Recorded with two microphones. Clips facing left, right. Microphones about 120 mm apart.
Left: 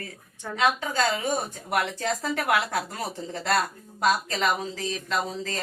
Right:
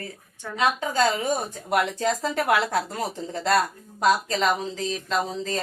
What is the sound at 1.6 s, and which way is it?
Speech, 25° right (ahead or behind).